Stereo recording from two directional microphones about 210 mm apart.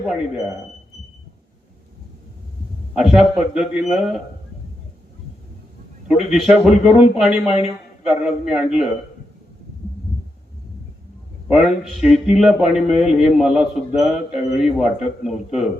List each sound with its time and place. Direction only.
0.0 s a man's voice: centre (ahead or behind)
2.9 s a man's voice: centre (ahead or behind)
6.1 s a man's voice: centre (ahead or behind)
7.3 s speech: 30° left (ahead or behind)
8.0 s a man's voice: 5° right (ahead or behind)
11.4 s a man's voice: 5° right (ahead or behind)